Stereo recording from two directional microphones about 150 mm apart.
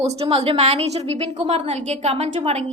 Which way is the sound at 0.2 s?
45° right (ahead or behind).